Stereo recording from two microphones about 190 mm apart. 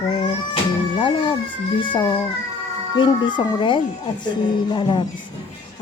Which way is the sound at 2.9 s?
25° left (ahead or behind).